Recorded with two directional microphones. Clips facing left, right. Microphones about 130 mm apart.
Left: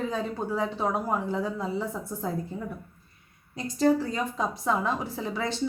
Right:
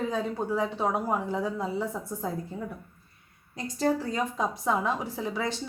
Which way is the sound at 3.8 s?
10° right (ahead or behind).